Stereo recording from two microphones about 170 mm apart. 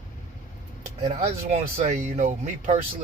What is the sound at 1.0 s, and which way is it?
Speech, 40° right (ahead or behind).